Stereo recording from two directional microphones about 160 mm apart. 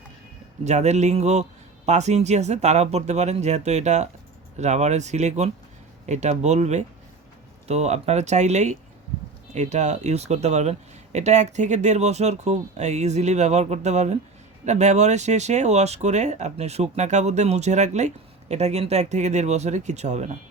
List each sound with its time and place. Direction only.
0.6 s speech: 45° right (ahead or behind)